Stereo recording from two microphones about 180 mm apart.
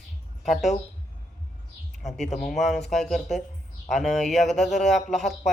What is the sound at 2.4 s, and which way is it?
Speech, centre (ahead or behind).